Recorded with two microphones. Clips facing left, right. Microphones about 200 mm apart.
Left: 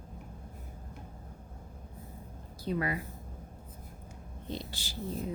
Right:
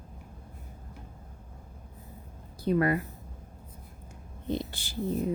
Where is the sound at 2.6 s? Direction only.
55° right (ahead or behind).